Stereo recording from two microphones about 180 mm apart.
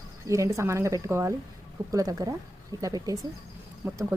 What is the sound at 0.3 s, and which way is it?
Speech, 15° right (ahead or behind).